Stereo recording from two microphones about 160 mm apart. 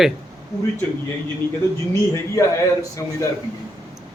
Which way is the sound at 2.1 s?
20° left (ahead or behind).